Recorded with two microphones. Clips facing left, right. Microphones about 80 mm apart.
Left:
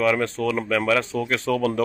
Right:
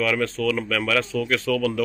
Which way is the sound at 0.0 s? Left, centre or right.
Left.